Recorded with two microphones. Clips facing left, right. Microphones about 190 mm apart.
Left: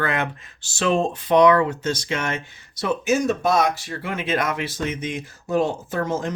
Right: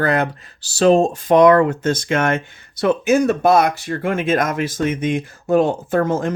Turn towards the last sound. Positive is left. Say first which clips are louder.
# right 6 dB
turn(degrees=-55)  # may be behind; listen again after turning